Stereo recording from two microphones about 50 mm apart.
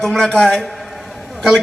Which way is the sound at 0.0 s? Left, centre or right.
Centre.